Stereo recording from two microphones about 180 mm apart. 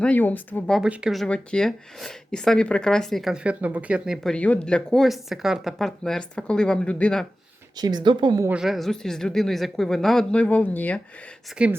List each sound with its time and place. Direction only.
0.0 s speech: 10° left (ahead or behind)
0.8 s speech: 5° right (ahead or behind)
7.8 s speech: 25° right (ahead or behind)
8.4 s speech: 5° right (ahead or behind)
11.5 s speech: 5° right (ahead or behind)